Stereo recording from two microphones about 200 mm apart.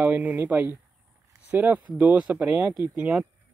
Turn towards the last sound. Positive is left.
turn(degrees=-10)  # may be behind; listen again after turning